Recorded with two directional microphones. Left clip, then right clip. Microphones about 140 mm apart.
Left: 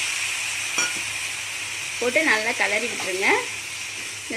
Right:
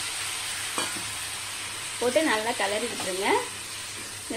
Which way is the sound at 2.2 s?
5° left (ahead or behind).